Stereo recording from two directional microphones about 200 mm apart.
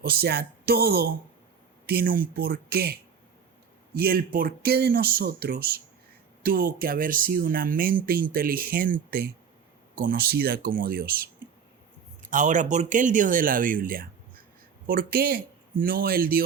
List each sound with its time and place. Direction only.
0.0 s speech: 50° right (ahead or behind)
12.3 s speech: 40° right (ahead or behind)